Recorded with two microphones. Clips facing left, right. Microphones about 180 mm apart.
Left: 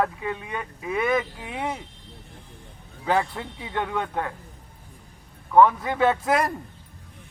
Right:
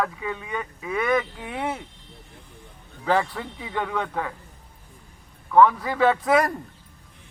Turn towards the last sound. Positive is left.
turn(degrees=0)  # may be behind; listen again after turning